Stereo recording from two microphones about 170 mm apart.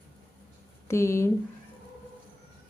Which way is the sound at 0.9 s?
15° left (ahead or behind).